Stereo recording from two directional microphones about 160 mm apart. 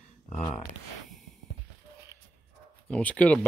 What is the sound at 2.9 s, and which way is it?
Speech, 10° left (ahead or behind).